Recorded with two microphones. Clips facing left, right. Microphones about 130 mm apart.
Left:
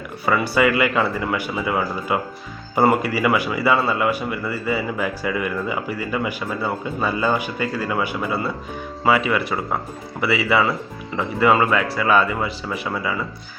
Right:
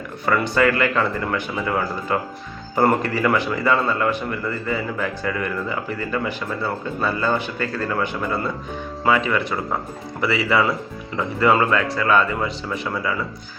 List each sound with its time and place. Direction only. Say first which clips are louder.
0.3 s a man's voice: even; 10° left (ahead or behind)